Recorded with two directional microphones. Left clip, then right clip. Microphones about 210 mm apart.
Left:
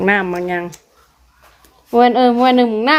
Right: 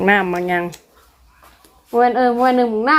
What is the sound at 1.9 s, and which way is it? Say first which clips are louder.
Speech: left 3 dB; 30° left (ahead or behind).